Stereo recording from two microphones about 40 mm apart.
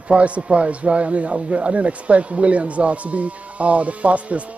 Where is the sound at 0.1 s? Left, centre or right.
Right.